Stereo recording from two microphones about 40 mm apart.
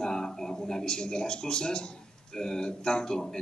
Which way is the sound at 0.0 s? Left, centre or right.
Centre.